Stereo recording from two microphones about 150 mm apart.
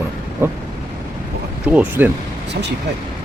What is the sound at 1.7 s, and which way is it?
Speech, 10° right (ahead or behind).